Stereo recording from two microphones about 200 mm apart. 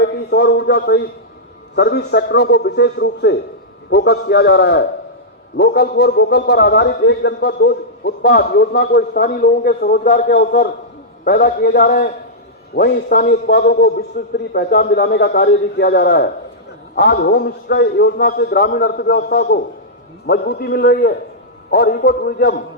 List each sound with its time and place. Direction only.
0.1 s a man's voice: 55° left (ahead or behind)